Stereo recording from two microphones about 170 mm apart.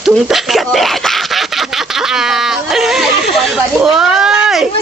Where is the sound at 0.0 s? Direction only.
Centre (ahead or behind).